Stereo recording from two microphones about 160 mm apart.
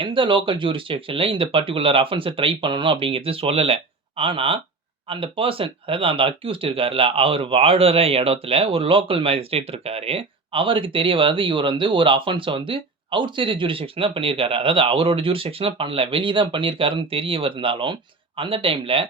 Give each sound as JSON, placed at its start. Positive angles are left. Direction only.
{"t": 0.0, "sound": "speech", "side_deg": -30}